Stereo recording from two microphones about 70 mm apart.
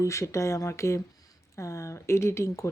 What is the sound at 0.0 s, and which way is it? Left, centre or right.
Speech, left.